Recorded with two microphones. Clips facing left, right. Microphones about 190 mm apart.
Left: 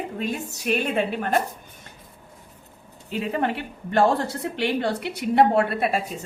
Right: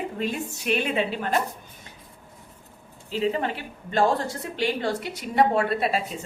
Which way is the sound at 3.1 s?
60° left (ahead or behind).